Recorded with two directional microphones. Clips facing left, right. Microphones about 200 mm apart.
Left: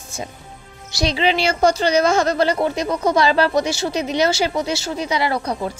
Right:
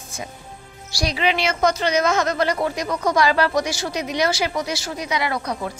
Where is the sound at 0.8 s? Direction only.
25° left (ahead or behind).